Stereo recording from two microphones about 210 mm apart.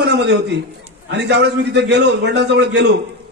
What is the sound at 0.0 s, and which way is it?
A man's voice, 55° right (ahead or behind).